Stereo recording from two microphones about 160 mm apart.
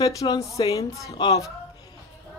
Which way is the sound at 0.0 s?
20° left (ahead or behind).